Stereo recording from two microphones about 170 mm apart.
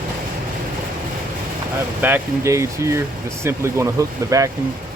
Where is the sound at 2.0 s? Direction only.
15° right (ahead or behind).